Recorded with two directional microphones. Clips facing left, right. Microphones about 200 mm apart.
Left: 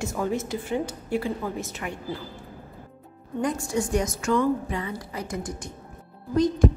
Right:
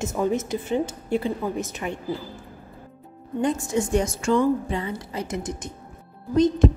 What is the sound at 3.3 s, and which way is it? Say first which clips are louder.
A woman's voice: right 3 dB; 25° right (ahead or behind).